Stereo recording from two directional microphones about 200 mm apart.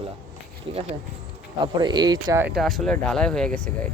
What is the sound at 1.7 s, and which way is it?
Speech, 20° right (ahead or behind).